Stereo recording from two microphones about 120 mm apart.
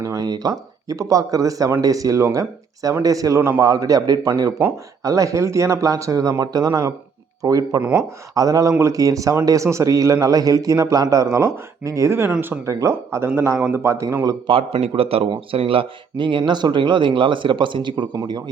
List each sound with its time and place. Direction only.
0.0 s a man's voice: 30° right (ahead or behind)
7.8 s speech: 10° right (ahead or behind)
8.4 s a man's voice: 30° right (ahead or behind)
14.4 s a man's voice: 50° right (ahead or behind)